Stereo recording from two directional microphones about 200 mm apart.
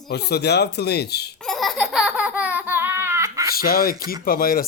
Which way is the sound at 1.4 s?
Centre (ahead or behind).